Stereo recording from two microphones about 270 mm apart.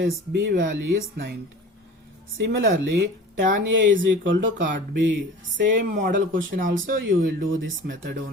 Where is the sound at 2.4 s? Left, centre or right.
Right.